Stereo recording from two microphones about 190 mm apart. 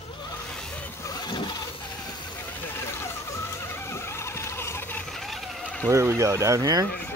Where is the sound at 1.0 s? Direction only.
20° left (ahead or behind).